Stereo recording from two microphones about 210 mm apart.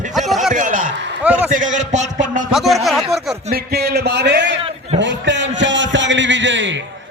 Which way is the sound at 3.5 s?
50° right (ahead or behind).